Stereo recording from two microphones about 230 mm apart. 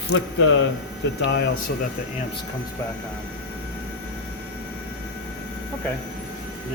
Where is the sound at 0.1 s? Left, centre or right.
Left.